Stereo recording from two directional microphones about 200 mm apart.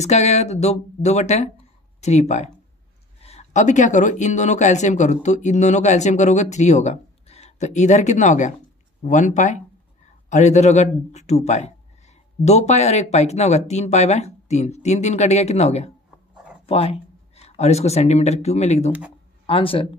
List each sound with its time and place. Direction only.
0.0 s a man's voice: 35° left (ahead or behind)
18.9 s speech: 5° right (ahead or behind)
19.4 s speech: 25° left (ahead or behind)